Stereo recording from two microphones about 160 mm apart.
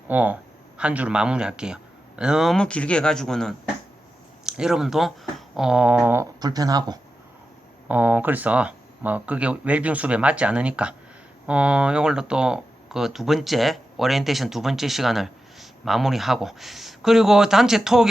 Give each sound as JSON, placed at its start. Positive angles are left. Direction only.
{"t": 0.1, "sound": "speech", "side_deg": -10}
{"t": 6.4, "sound": "speech", "side_deg": -25}
{"t": 7.9, "sound": "speech", "side_deg": -10}